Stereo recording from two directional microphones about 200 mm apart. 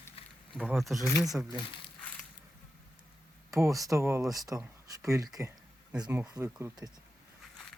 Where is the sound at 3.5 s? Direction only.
15° right (ahead or behind).